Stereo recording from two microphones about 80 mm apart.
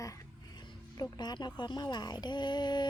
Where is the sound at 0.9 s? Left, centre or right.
Left.